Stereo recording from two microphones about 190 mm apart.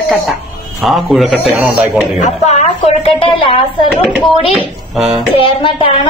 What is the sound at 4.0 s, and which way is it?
A woman's voice, 5° right (ahead or behind).